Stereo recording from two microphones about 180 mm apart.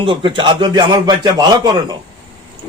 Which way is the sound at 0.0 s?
25° right (ahead or behind).